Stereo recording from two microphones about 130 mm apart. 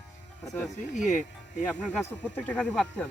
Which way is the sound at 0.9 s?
70° left (ahead or behind).